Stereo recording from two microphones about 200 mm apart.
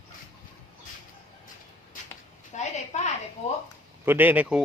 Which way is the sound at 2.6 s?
35° left (ahead or behind).